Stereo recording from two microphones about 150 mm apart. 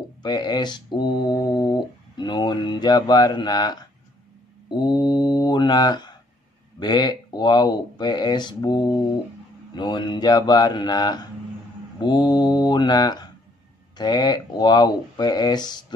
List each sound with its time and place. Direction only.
0.2 s mantra: 30° left (ahead or behind)
4.6 s speech: 30° left (ahead or behind)